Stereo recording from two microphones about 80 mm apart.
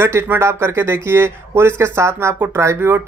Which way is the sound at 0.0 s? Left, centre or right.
Right.